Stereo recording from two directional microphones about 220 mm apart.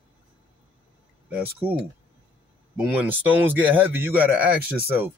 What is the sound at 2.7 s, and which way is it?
A man's voice, 5° right (ahead or behind).